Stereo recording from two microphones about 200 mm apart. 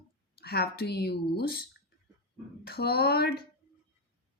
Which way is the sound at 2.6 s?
50° left (ahead or behind).